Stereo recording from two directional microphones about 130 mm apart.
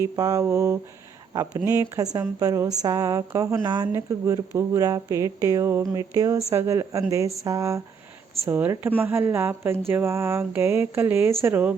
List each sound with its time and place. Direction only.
0.0 s speech: 25° right (ahead or behind)